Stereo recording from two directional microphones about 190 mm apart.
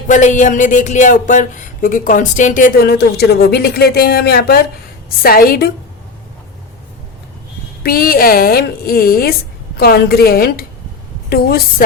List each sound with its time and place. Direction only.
0.1 s speech: 40° left (ahead or behind)
7.8 s speech: 50° left (ahead or behind)